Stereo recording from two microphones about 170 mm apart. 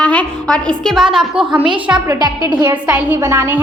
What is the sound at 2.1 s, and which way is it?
Speech, 25° right (ahead or behind).